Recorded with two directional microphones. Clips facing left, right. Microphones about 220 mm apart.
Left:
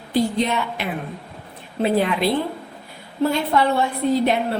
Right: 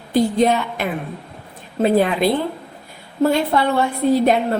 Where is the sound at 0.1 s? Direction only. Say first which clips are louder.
Right 4 dB; 50° right (ahead or behind).